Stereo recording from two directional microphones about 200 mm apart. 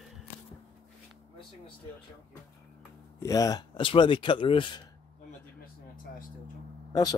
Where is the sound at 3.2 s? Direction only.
15° left (ahead or behind).